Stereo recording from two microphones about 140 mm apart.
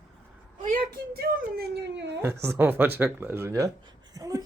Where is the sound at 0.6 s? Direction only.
80° right.